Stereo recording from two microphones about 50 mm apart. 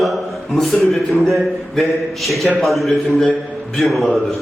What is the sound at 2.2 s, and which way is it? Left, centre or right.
A man's voice, centre.